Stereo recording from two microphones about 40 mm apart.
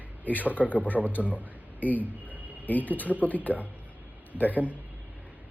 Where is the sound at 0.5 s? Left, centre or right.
Left.